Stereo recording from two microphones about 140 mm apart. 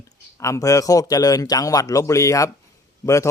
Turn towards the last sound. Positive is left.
turn(degrees=20)  # may be behind; listen again after turning